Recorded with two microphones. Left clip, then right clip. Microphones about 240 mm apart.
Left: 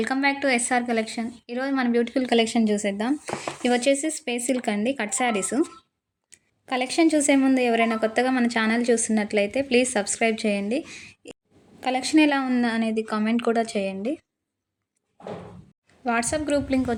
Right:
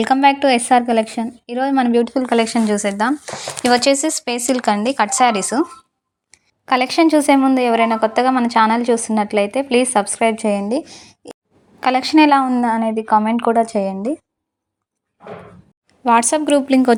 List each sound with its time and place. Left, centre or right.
0.0 s a woman's voice: right
2.2 s speech: centre
6.7 s speech: centre
16.0 s a woman's voice: right